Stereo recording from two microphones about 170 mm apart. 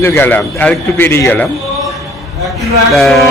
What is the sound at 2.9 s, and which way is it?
Speech, centre (ahead or behind).